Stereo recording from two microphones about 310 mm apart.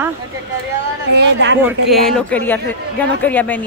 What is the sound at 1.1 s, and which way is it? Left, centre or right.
Speech, right.